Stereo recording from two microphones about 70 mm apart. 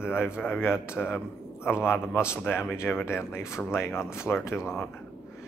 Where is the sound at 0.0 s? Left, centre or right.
Left.